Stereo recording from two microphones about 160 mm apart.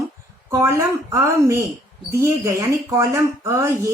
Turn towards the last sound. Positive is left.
turn(degrees=-20)  # may be behind; listen again after turning